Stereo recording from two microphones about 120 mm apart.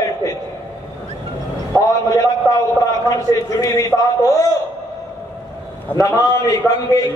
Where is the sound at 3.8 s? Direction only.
25° left (ahead or behind).